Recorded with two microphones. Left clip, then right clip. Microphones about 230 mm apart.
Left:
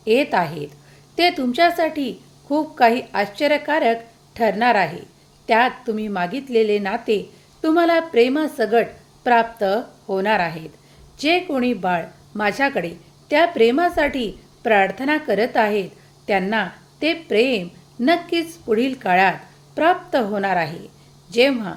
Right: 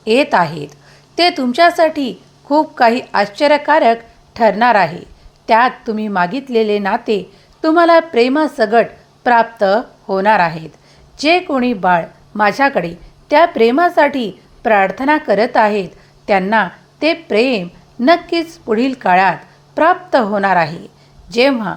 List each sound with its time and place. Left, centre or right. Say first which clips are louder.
0.0 s speech: right 6 dB; centre